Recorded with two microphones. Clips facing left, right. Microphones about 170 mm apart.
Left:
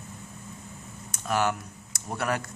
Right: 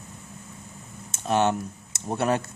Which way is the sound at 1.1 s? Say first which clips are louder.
Right 4 dB; 25° right (ahead or behind).